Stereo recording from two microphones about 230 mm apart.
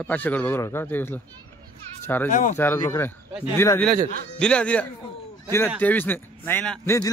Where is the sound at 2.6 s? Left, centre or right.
Centre.